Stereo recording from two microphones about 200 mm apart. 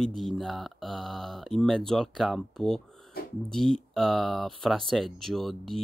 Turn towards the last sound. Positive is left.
turn(degrees=0)  # may be behind; listen again after turning